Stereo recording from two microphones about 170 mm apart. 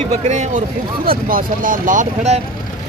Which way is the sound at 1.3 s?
55° right (ahead or behind).